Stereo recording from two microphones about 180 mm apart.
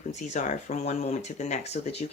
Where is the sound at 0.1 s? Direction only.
40° left (ahead or behind).